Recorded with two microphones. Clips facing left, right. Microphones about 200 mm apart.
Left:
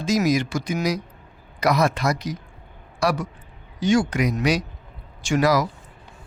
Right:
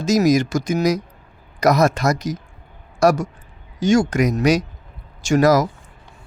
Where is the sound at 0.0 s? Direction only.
45° right (ahead or behind).